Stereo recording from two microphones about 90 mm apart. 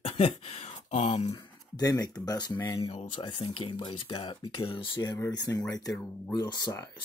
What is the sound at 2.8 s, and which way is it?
Speech, 70° left (ahead or behind).